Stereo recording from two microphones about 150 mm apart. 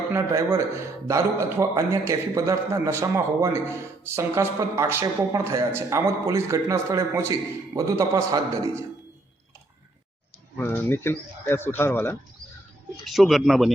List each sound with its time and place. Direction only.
0.1 s a man's voice: 15° right (ahead or behind)
10.6 s speech: 15° left (ahead or behind)
13.1 s speech: centre (ahead or behind)